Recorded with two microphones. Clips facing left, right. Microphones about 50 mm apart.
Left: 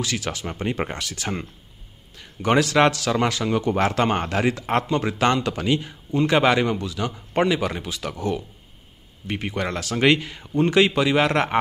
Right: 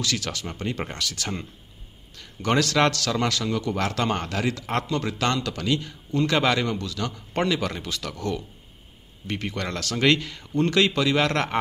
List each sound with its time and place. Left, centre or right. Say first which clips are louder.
0.0 s a man's voice: left 2 dB; centre